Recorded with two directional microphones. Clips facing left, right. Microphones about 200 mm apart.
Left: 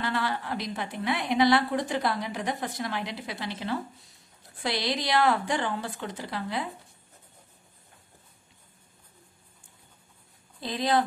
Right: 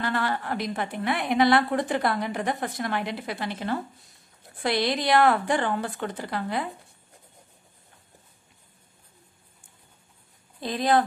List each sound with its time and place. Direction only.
0.0 s a woman's voice: 50° right (ahead or behind)
10.6 s a woman's voice: 50° right (ahead or behind)